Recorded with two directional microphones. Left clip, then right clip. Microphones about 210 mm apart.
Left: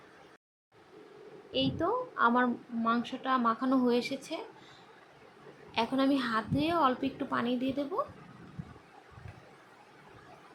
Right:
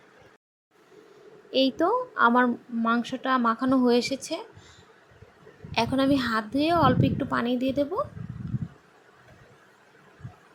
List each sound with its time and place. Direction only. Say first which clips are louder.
1.5 s a woman's voice: right 8 dB; 35° right (ahead or behind)
5.7 s a woman's voice: right 5 dB; 25° right (ahead or behind)